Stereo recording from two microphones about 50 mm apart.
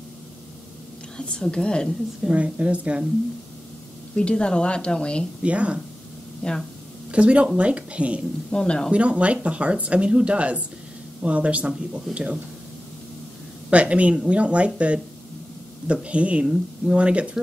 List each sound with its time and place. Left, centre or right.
1.1 s a woman's voice: centre
2.3 s speech: right
4.1 s a woman's voice: left
5.4 s speech: right
6.4 s speech: centre
7.1 s speech: right
8.5 s speech: centre
8.9 s speech: right
13.7 s speech: right